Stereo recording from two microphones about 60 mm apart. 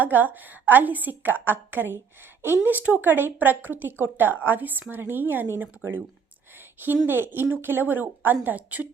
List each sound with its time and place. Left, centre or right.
0.0 s a woman's voice: right